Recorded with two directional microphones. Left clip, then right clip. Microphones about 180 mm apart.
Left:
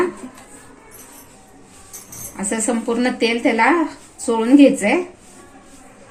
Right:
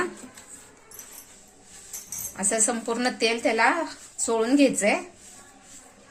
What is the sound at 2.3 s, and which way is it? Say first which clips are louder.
A woman's voice: left 4 dB; 45° right (ahead or behind).